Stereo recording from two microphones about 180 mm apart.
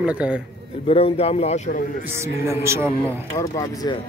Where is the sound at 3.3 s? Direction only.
20° left (ahead or behind).